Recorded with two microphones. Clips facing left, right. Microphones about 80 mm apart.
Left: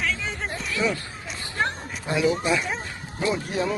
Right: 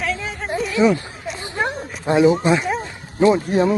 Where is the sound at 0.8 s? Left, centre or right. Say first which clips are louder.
Right 9 dB; centre.